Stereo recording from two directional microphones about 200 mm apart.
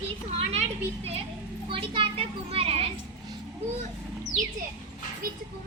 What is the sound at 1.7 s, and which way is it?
A child's voice, 25° right (ahead or behind).